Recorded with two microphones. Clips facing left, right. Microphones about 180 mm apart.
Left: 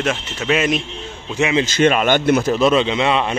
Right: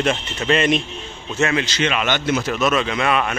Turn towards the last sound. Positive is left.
turn(degrees=25)  # may be behind; listen again after turning